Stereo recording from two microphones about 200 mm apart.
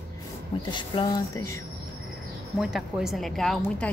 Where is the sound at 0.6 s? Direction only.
25° left (ahead or behind).